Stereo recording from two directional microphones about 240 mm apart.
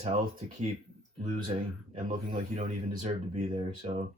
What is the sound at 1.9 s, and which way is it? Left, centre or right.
Speech, right.